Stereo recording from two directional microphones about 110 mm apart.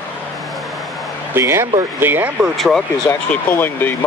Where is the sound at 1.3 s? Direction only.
25° right (ahead or behind).